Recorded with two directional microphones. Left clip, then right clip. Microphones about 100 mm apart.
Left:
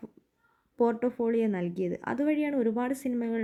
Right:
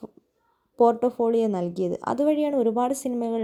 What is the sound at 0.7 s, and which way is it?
Speech, 15° right (ahead or behind).